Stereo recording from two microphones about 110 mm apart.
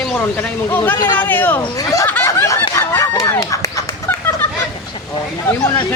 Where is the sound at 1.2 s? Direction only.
15° left (ahead or behind).